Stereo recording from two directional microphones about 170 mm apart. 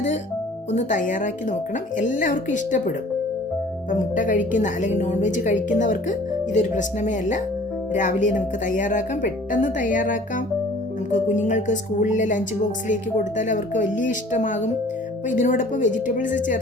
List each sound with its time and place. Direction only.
0.7 s a woman's voice: 45° left (ahead or behind)